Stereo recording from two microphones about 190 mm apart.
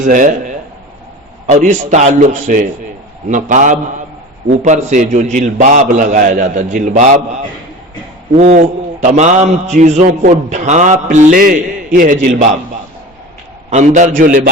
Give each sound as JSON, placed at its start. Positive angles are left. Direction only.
{"t": 0.0, "sound": "a man's voice", "side_deg": -40}
{"t": 8.4, "sound": "a man's voice", "side_deg": -40}
{"t": 13.7, "sound": "a man's voice", "side_deg": -35}